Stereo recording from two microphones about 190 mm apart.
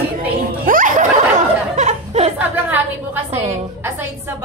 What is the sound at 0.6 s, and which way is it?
Snicker, 45° right (ahead or behind).